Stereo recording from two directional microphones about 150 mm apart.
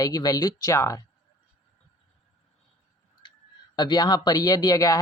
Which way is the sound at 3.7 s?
30° left (ahead or behind).